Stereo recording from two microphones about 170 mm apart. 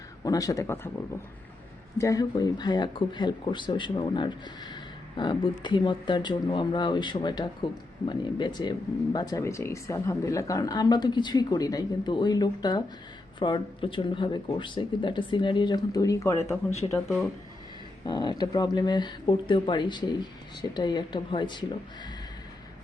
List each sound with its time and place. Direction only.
0.3 s speech: 20° left (ahead or behind)
2.0 s speech: 20° left (ahead or behind)
18.0 s speech: 25° left (ahead or behind)